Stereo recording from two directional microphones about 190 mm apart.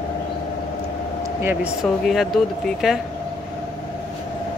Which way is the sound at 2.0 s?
Centre (ahead or behind).